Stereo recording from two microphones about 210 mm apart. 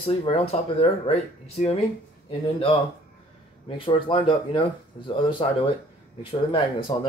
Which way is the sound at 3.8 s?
25° left (ahead or behind).